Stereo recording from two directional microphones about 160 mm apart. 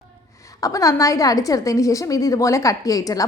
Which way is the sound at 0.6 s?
20° left (ahead or behind).